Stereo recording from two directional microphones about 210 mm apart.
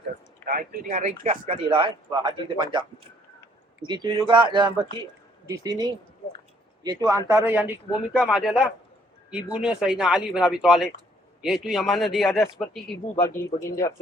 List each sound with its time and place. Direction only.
0.4 s speech: 40° right (ahead or behind); by 2.8 s 20° right (ahead or behind)
3.8 s speech: 20° right (ahead or behind); by 12.8 s centre (ahead or behind)
13.2 s speech: 15° left (ahead or behind)